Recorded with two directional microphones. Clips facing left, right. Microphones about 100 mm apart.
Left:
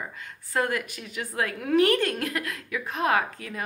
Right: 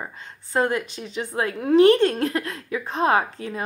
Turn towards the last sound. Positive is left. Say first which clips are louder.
# right 4 dB
turn(degrees=-30)  # may be behind; listen again after turning